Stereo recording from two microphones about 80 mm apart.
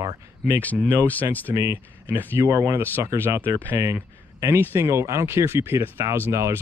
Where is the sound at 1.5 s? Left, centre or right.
Right.